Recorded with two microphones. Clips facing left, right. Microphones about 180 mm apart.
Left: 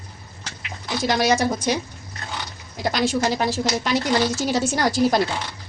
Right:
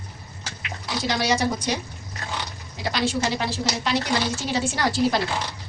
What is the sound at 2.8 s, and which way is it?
A woman's voice, 45° left (ahead or behind).